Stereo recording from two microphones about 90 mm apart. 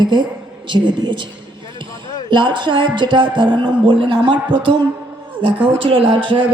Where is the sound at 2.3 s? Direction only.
60° right (ahead or behind).